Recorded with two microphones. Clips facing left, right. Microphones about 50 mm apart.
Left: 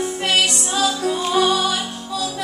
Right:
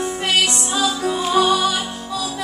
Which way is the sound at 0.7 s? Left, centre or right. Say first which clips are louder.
Left 1 dB; centre.